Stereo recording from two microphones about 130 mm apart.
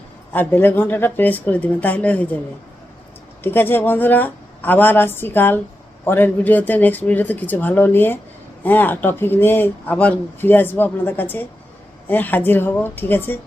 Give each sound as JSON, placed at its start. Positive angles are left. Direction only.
{"t": 0.3, "sound": "speech", "side_deg": 15}
{"t": 3.4, "sound": "speech", "side_deg": 15}